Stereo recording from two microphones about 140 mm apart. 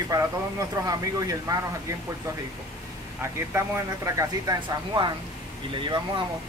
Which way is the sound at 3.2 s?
20° right (ahead or behind).